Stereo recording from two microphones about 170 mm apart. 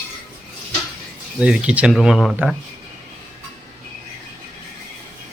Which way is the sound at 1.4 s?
5° right (ahead or behind).